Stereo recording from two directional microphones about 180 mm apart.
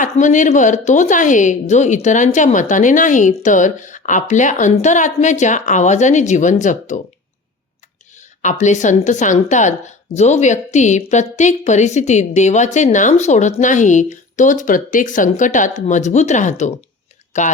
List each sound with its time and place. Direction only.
0.0 s a woman's voice: 45° left (ahead or behind)
8.4 s a woman's voice: 40° left (ahead or behind)